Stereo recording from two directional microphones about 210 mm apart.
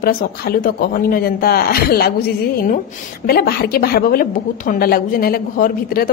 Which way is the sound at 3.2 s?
45° left (ahead or behind).